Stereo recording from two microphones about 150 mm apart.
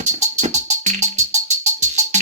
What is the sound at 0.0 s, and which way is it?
Music, 50° right (ahead or behind).